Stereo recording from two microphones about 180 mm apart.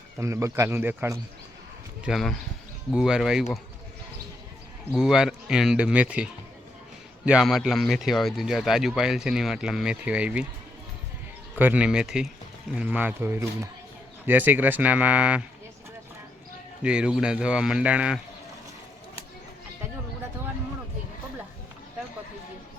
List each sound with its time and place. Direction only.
0.2 s speech: 15° right (ahead or behind)
2.0 s speech: centre (ahead or behind)
4.9 s speech: 5° right (ahead or behind)
11.5 s speech: 10° right (ahead or behind)
16.8 s speech: 5° right (ahead or behind)